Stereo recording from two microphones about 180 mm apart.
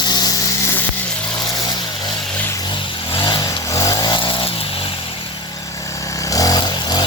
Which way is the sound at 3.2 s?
25° left (ahead or behind).